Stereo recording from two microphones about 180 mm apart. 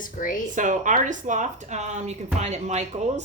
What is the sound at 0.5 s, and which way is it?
A woman's voice, 45° right (ahead or behind).